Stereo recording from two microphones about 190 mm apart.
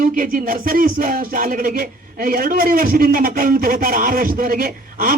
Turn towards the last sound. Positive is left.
turn(degrees=-50)  # may be behind; listen again after turning